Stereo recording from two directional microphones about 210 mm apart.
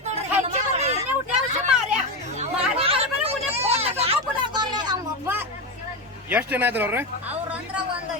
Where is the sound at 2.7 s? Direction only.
25° right (ahead or behind).